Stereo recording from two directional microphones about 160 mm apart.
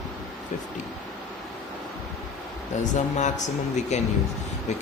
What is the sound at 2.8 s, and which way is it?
Speech, 50° left (ahead or behind).